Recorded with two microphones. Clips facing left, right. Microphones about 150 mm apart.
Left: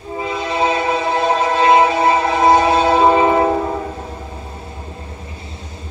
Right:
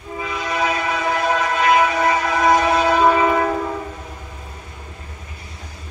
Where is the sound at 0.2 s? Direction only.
30° left (ahead or behind).